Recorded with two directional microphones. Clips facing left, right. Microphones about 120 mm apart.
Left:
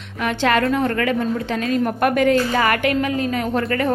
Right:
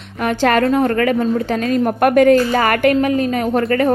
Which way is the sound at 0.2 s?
45° right (ahead or behind).